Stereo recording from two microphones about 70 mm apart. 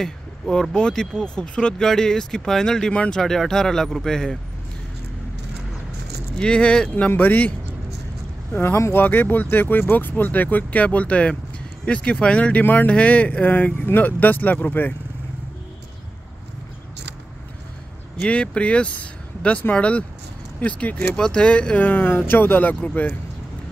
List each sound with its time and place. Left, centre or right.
0.0 s speech: centre
6.3 s speech: centre
7.1 s speech: left
8.5 s speech: left
18.2 s speech: centre